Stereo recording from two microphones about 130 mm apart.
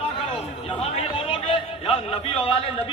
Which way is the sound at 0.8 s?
50° left (ahead or behind).